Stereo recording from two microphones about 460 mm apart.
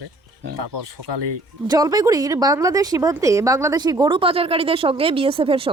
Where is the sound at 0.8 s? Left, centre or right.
Right.